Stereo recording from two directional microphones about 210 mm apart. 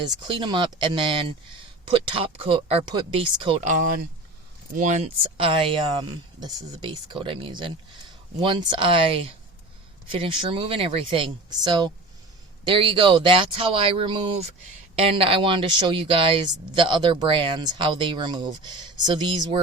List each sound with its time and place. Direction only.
0.3 s speech: 25° right (ahead or behind)
4.7 s speech: 35° right (ahead or behind)